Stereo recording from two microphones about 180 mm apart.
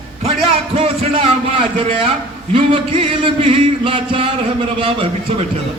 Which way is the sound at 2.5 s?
30° right (ahead or behind).